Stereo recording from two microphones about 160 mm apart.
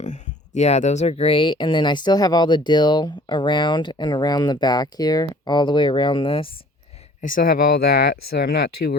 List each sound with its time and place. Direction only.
0.0 s speech: 45° left (ahead or behind)
7.2 s speech: 60° left (ahead or behind); by 9.0 s 80° left